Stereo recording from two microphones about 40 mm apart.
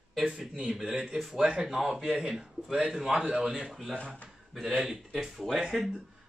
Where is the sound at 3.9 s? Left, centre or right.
Left.